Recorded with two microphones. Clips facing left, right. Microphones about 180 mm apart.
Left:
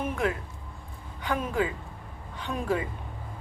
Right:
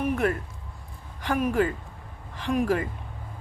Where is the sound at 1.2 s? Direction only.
80° right.